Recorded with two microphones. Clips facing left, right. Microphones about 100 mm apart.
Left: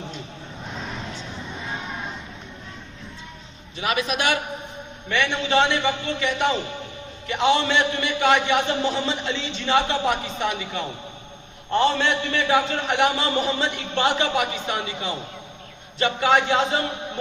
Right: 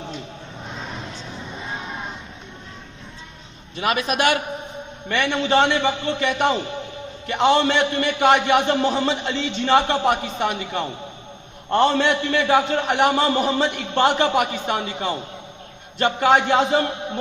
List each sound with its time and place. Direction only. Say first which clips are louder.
3.8 s a man's voice: right 3 dB; 55° right (ahead or behind)
6.1 s a man's voice: right 2 dB; 55° right (ahead or behind)